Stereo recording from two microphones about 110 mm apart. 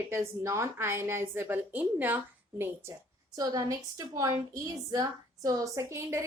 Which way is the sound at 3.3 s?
35° right (ahead or behind).